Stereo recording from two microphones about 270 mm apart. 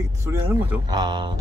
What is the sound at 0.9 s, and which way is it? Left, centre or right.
Speech, centre.